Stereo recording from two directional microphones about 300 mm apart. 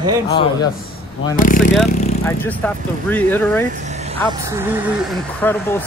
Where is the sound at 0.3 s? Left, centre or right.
Centre.